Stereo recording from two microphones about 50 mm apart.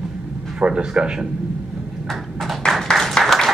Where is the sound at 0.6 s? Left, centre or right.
Centre.